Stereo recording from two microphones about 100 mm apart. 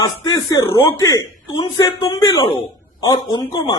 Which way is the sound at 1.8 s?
40° left (ahead or behind).